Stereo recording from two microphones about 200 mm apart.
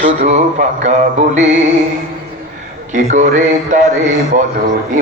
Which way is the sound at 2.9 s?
35° right (ahead or behind).